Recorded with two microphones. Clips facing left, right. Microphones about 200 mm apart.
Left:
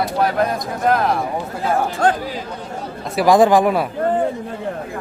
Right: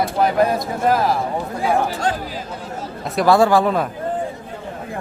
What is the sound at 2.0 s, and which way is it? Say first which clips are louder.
Speech: left 5 dB; 55° left (ahead or behind).